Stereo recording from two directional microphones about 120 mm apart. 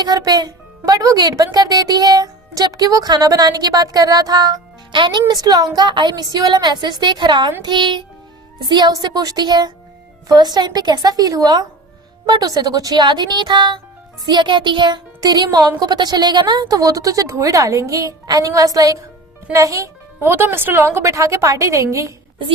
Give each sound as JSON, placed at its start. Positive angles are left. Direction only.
{"t": 0.0, "sound": "a woman's voice", "side_deg": -35}